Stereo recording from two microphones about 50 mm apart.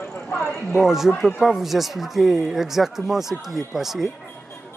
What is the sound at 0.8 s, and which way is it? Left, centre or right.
Speech, centre.